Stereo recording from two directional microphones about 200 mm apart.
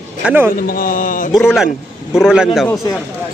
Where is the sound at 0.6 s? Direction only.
45° left (ahead or behind).